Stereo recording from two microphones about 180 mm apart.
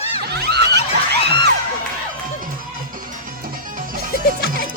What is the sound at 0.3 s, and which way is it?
Snicker, 65° right (ahead or behind).